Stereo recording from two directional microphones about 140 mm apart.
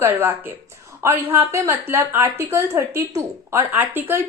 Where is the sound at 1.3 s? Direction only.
20° right (ahead or behind).